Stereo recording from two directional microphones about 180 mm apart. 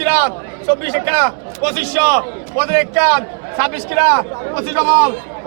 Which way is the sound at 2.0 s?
15° right (ahead or behind).